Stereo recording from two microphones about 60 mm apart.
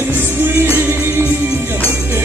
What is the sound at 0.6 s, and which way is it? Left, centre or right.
Music, right.